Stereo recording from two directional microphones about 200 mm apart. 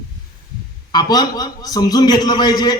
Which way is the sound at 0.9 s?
20° left (ahead or behind).